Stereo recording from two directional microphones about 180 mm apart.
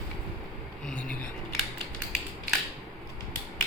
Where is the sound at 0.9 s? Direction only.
5° left (ahead or behind).